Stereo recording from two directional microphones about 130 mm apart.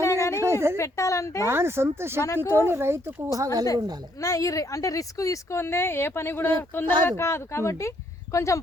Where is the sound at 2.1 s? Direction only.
20° left (ahead or behind).